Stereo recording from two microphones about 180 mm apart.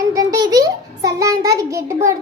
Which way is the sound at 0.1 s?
20° right (ahead or behind).